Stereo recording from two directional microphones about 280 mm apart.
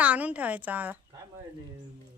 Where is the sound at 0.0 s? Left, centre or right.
Centre.